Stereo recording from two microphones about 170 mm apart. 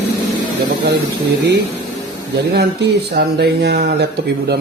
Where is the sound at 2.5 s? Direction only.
75° right (ahead or behind).